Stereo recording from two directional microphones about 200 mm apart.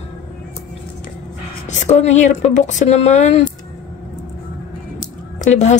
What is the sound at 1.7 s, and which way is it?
Speech, 35° left (ahead or behind).